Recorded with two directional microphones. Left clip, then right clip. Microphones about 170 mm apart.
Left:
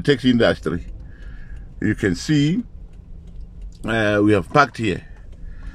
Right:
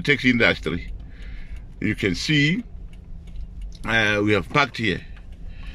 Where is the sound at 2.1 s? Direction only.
20° right (ahead or behind).